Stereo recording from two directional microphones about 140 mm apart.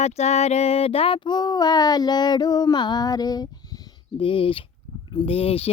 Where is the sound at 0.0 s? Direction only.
50° left (ahead or behind); by 3.4 s 30° left (ahead or behind).